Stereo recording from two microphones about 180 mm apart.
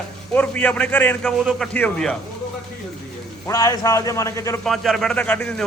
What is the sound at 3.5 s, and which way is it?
A man's voice, 15° left (ahead or behind).